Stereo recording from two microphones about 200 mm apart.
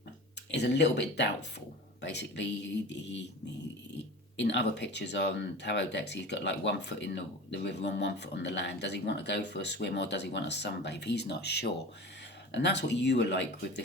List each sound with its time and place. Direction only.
0.5 s speech: 60° left (ahead or behind)
4.4 s speech: 60° left (ahead or behind)